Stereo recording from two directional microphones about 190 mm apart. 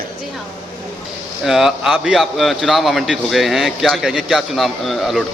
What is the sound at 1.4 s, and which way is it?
A man's voice, centre (ahead or behind).